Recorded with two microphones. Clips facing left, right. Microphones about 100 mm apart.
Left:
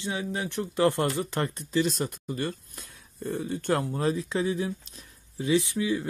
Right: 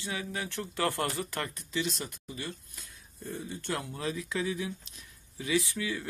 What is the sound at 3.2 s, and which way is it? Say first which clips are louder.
Speech: left 8 dB; 65° left (ahead or behind).